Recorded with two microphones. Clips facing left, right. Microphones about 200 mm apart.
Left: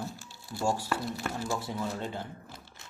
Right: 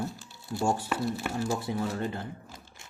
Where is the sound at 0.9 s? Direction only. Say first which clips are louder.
Right 3 dB; 10° right (ahead or behind).